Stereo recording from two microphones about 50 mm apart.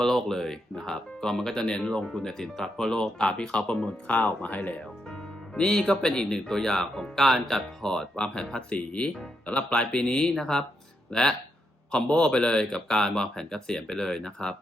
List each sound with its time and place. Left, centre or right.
0.0 s speech: centre
4.0 s speech: left
5.5 s speech: centre
11.9 s speech: centre